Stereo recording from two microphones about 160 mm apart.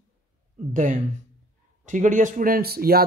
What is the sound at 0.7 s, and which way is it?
Speech, 55° right (ahead or behind).